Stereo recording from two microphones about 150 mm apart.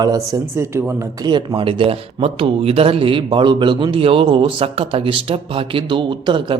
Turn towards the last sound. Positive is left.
turn(degrees=-30)  # may be behind; listen again after turning